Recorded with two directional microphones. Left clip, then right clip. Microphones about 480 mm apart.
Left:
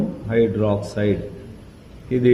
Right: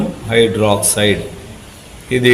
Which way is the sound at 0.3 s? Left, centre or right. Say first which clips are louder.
Right 7 dB; left.